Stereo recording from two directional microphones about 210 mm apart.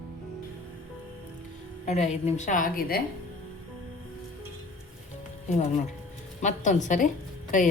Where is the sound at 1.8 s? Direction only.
35° left (ahead or behind).